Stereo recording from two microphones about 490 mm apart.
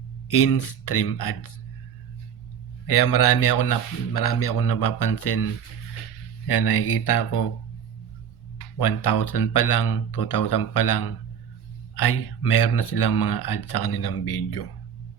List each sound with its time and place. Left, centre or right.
0.3 s speech: left
2.8 s speech: left
6.5 s speech: left
8.8 s speech: left